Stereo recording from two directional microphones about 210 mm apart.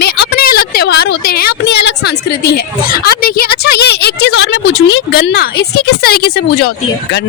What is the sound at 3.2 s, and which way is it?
Speech, 45° left (ahead or behind).